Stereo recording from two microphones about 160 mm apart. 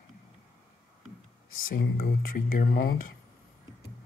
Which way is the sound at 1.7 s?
70° left (ahead or behind).